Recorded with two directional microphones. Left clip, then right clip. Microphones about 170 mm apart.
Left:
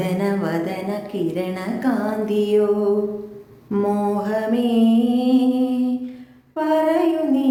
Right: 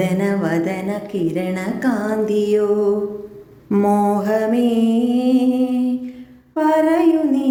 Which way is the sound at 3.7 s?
25° right (ahead or behind).